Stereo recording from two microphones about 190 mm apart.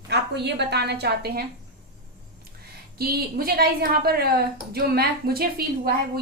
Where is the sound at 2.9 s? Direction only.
55° right (ahead or behind).